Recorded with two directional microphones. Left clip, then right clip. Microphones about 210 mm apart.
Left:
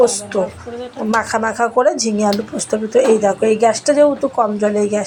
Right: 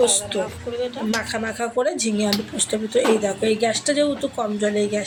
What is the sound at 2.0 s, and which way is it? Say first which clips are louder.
A woman's voice: left 6 dB; 5° left (ahead or behind).